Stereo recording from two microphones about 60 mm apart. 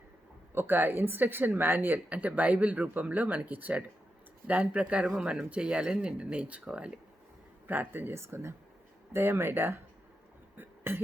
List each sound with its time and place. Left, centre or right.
0.5 s speech: right; by 7.0 s centre
7.7 s speech: right
8.2 s speech: right
10.6 s a sound: right